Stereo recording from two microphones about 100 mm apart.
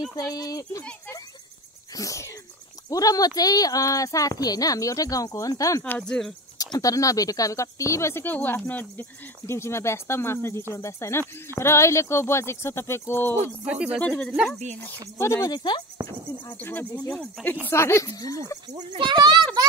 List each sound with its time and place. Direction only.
0.1 s speech: 35° left (ahead or behind)
2.0 s speech: 30° left (ahead or behind)
5.9 s speech: 10° left (ahead or behind)
6.6 s speech: 35° left (ahead or behind)
13.7 s speech: 10° right (ahead or behind)
14.0 s speech: 10° left (ahead or behind)
15.1 s speech: 30° left (ahead or behind)
15.5 s speech: 45° left (ahead or behind)
16.0 s speech: 40° right (ahead or behind)
16.5 s speech: 15° left (ahead or behind); by 18.4 s 35° left (ahead or behind)
18.9 s a child's voice: 50° right (ahead or behind)